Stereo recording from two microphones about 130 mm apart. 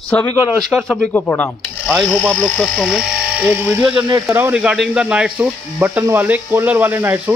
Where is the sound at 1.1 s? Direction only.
15° left (ahead or behind); by 3.5 s 5° right (ahead or behind).